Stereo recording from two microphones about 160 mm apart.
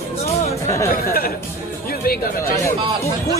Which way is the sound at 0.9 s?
70° left (ahead or behind).